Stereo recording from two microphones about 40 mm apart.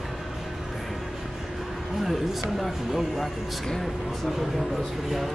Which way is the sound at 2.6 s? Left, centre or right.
Centre.